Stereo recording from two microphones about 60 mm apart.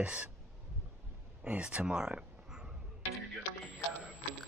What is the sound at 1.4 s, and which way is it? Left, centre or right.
Speech, centre.